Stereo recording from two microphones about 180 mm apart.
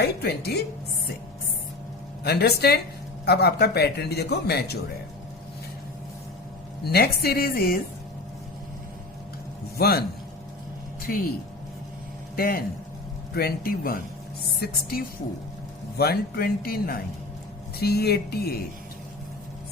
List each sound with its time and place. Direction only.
0.0 s a man's voice: 65° left (ahead or behind)
2.2 s a man's voice: 60° left (ahead or behind)
6.8 s a man's voice: 60° left (ahead or behind)
9.7 s a man's voice: 60° left (ahead or behind)
11.0 s speech: 55° left (ahead or behind)
12.4 s a man's voice: 55° left (ahead or behind)